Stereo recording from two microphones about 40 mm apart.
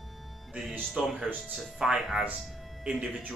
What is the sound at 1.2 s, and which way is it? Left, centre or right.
Speech, centre.